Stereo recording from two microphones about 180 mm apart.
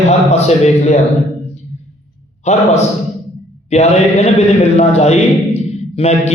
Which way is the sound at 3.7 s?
35° left (ahead or behind).